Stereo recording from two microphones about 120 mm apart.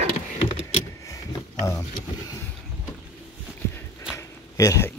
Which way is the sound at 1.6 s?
30° left (ahead or behind).